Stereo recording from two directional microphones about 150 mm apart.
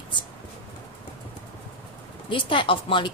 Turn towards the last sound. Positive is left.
turn(degrees=35)  # may be behind; listen again after turning